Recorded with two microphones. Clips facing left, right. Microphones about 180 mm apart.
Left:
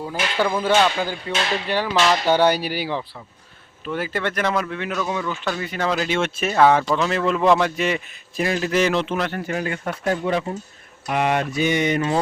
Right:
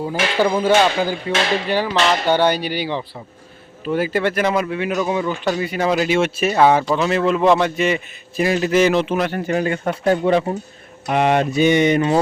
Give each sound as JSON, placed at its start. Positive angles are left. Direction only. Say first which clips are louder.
{"t": 0.0, "sound": "speech", "louder": "right 4 dB", "side_deg": -15}
{"t": 0.6, "sound": "speech", "louder": "right 2 dB", "side_deg": -5}
{"t": 3.8, "sound": "speech", "louder": "right 6 dB", "side_deg": -10}
{"t": 9.5, "sound": "speech", "louder": "right 6 dB", "side_deg": -30}